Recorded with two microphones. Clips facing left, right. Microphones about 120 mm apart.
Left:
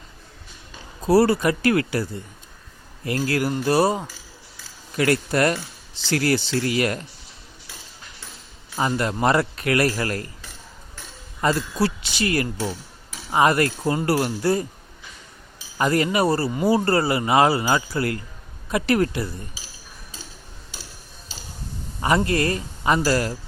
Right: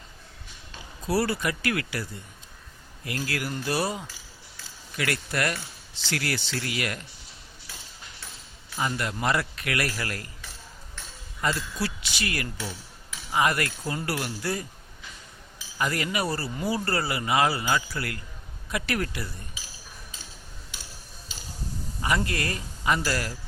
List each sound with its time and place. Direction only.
1.0 s speech: 35° left (ahead or behind)
8.8 s speech: 35° left (ahead or behind)
11.3 s speech: 35° left (ahead or behind)
15.8 s speech: 35° left (ahead or behind)
22.0 s speech: 35° left (ahead or behind)